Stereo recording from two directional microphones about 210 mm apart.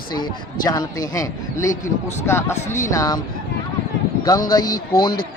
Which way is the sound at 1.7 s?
40° left (ahead or behind).